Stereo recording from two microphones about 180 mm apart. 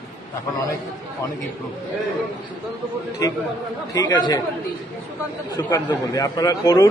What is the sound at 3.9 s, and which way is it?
Speech, 25° left (ahead or behind).